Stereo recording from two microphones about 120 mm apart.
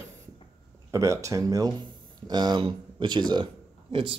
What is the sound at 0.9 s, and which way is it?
Speech, 25° right (ahead or behind).